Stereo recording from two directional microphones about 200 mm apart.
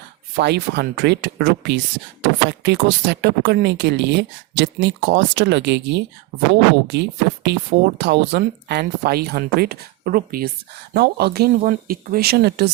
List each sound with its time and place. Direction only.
0.3 s speech: 55° right (ahead or behind)